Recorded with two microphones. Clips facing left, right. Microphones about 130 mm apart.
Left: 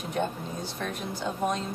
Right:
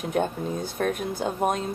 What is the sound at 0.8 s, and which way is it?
Speech, 55° right (ahead or behind).